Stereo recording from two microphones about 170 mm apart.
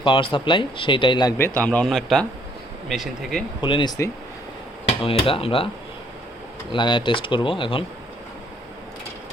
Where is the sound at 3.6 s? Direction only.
30° left (ahead or behind).